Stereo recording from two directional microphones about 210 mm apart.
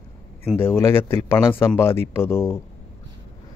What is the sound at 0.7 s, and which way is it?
Speech, 10° left (ahead or behind).